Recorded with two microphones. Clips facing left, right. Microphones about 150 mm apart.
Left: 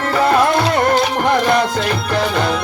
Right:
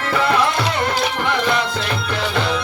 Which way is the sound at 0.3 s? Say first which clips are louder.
Left 6 dB; 45° left (ahead or behind).